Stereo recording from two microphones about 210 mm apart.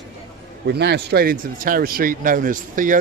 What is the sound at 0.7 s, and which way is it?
A man's voice, 55° right (ahead or behind).